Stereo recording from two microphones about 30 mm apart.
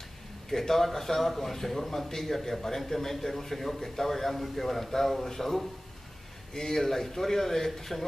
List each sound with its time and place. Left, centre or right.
0.5 s a man's voice: centre